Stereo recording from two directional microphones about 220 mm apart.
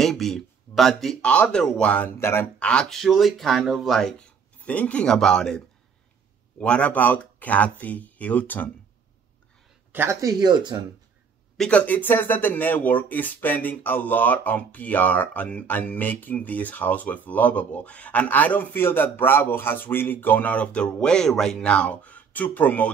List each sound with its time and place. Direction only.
0.0 s speech: centre (ahead or behind)
6.6 s speech: 5° left (ahead or behind)
9.9 s speech: 15° right (ahead or behind)
11.5 s speech: 5° left (ahead or behind)